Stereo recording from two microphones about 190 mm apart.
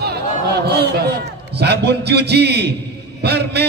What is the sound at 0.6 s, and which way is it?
Mantra, 60° right (ahead or behind).